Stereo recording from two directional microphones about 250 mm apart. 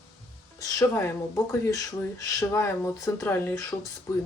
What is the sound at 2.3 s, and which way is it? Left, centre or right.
Speech, centre.